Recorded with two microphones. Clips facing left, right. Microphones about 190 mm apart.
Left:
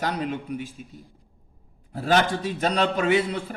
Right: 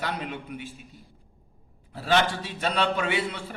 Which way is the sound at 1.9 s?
45° left (ahead or behind).